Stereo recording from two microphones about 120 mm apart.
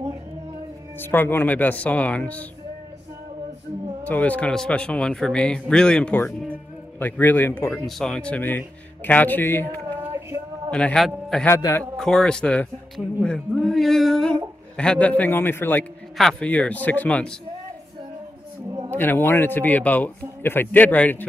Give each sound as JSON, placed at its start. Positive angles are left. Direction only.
{"t": 0.9, "sound": "speech", "side_deg": 15}
{"t": 4.0, "sound": "a man's voice", "side_deg": 10}
{"t": 7.8, "sound": "speech", "side_deg": 5}
{"t": 10.7, "sound": "a man's voice", "side_deg": 10}
{"t": 11.4, "sound": "a man's voice", "side_deg": 25}
{"t": 12.0, "sound": "speech", "side_deg": 5}
{"t": 16.2, "sound": "speech", "side_deg": 5}
{"t": 18.9, "sound": "speech", "side_deg": 15}